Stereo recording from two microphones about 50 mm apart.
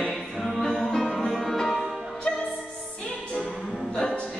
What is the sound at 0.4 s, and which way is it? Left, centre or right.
Music, centre.